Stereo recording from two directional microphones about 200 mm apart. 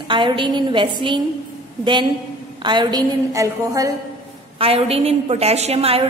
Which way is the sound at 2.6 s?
20° right (ahead or behind).